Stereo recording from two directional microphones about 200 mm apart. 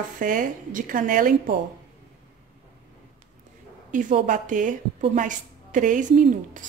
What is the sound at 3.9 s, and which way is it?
A woman's voice, 40° right (ahead or behind).